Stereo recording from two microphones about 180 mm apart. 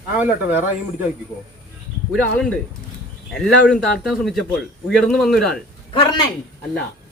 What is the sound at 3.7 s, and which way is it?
A man's voice, 5° left (ahead or behind).